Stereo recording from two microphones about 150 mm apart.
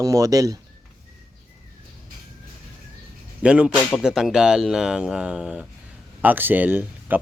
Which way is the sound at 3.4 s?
5° right (ahead or behind).